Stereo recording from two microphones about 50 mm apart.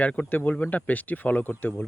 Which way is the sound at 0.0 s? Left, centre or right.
Left.